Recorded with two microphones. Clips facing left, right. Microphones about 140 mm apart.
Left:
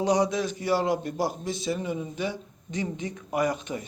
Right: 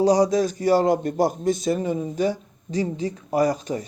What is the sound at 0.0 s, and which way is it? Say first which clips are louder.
A man's voice: right 6 dB; 35° right (ahead or behind).